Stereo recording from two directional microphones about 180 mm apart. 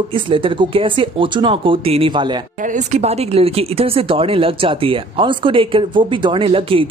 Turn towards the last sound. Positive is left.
turn(degrees=-30)  # may be behind; listen again after turning